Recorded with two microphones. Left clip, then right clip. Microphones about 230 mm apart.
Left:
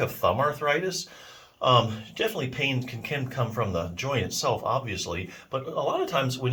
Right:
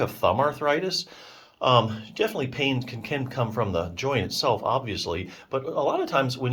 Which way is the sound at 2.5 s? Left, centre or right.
Centre.